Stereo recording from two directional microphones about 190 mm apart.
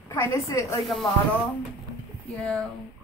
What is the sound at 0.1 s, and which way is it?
Speech, 15° left (ahead or behind).